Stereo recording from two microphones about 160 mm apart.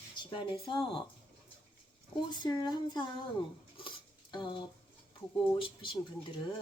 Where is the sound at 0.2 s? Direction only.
30° left (ahead or behind).